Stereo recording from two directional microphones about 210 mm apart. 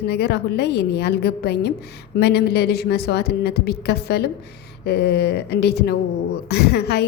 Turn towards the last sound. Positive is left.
turn(degrees=50)  # may be behind; listen again after turning